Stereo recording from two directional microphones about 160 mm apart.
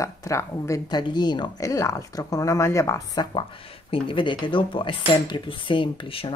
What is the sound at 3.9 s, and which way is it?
Speech, 30° left (ahead or behind).